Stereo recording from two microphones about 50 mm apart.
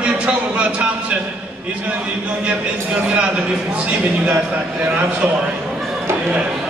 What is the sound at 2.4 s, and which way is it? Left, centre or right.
A man's voice, right.